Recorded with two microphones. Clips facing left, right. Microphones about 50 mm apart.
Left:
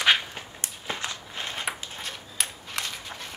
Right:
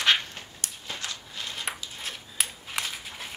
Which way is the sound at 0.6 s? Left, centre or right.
Left.